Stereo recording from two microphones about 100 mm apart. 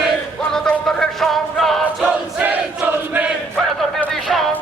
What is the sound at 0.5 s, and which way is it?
Music, 5° left (ahead or behind).